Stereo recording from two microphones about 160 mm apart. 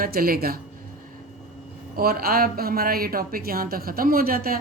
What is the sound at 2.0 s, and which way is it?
A woman's voice, 70° right (ahead or behind).